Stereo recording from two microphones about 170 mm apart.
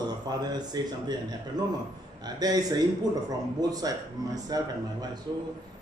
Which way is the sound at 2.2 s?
20° right (ahead or behind).